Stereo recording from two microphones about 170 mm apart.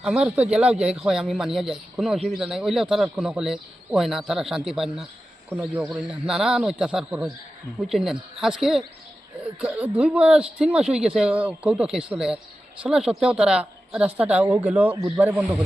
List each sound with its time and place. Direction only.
0.0 s a man's voice: 5° right (ahead or behind)